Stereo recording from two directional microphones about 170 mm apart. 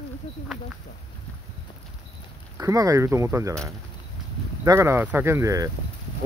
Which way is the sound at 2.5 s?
20° right (ahead or behind).